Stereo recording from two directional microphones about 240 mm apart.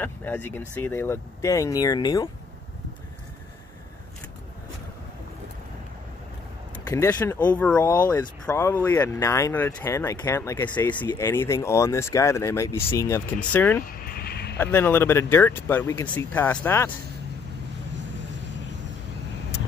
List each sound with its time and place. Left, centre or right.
0.0 s speech: centre
6.9 s speech: centre
14.1 s a sound: left
14.6 s speech: centre